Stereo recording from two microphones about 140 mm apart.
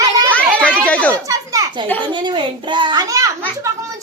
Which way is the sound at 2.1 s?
35° right (ahead or behind).